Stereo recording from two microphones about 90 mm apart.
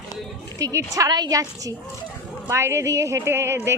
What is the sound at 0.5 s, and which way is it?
A woman's voice, 40° right (ahead or behind).